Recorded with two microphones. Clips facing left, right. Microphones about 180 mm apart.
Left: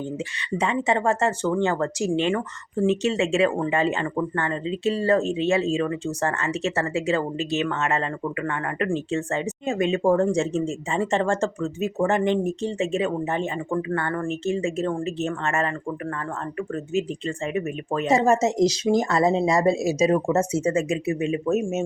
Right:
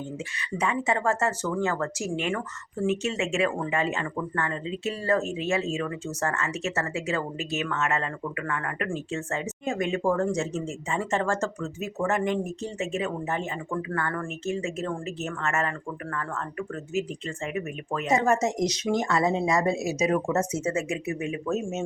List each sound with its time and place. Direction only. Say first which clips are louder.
0.6 s speech: left 3 dB; 30° left (ahead or behind)